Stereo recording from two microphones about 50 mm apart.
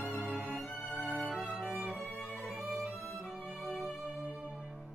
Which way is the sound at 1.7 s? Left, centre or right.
Right.